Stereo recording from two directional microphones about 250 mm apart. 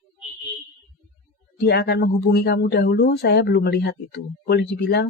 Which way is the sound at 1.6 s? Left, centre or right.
Left.